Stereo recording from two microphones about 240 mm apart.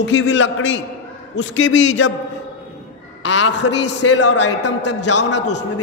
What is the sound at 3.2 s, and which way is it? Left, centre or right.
Speech, left.